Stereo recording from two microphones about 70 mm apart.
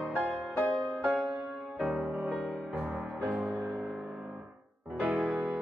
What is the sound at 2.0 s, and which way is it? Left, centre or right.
Music, centre.